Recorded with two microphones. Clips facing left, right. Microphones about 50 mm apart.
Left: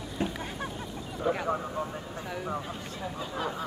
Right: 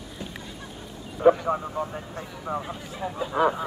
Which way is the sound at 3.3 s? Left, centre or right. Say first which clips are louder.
Right 12 dB; right.